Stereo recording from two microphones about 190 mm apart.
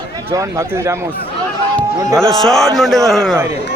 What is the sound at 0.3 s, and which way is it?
Speech, 15° right (ahead or behind).